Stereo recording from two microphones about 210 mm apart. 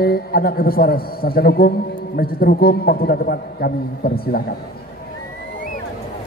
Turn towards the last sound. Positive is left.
turn(degrees=45)  # may be behind; listen again after turning